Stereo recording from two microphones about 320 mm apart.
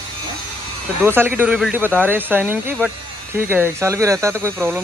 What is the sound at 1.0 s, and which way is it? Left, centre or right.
Speech, centre.